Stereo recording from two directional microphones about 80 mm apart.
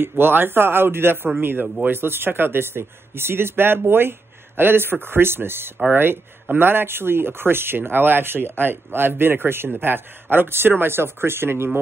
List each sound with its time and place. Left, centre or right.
0.2 s speech: right